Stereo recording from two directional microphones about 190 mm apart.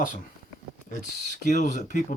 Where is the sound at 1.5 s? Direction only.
45° left (ahead or behind).